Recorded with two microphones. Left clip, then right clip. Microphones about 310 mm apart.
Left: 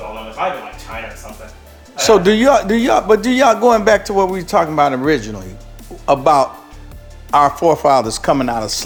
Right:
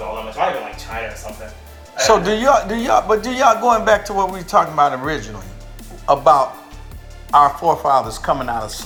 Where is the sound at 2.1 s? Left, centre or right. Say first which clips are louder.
Left 3 dB; left.